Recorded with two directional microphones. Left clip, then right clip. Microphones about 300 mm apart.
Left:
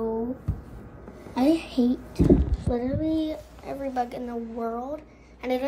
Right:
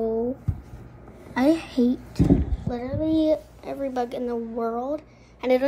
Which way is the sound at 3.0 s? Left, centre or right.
Right.